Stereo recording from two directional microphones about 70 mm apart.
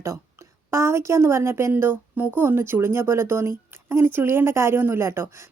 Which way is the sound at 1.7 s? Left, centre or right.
Right.